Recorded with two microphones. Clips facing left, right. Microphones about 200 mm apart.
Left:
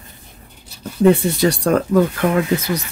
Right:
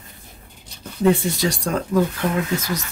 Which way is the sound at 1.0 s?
60° left (ahead or behind).